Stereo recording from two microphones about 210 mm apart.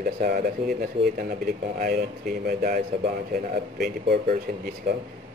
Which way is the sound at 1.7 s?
45° right (ahead or behind).